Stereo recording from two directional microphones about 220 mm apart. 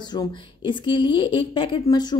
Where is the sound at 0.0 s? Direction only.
20° left (ahead or behind).